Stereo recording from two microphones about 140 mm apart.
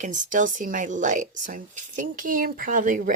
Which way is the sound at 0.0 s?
65° right (ahead or behind).